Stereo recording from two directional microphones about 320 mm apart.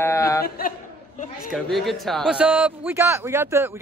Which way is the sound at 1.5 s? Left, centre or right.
Centre.